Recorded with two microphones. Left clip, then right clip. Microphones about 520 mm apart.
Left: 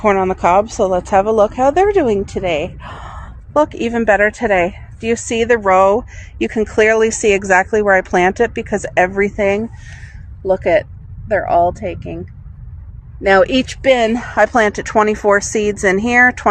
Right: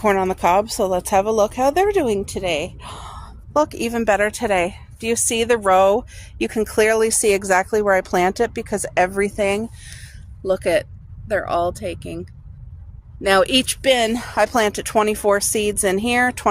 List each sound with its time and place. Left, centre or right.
0.0 s a woman's voice: right